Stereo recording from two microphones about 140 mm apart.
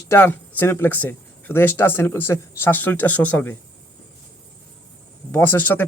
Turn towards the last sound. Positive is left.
turn(degrees=15)  # may be behind; listen again after turning